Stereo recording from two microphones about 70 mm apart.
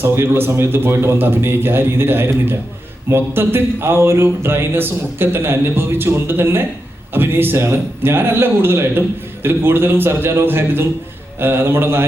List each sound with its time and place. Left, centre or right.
0.0 s speech: right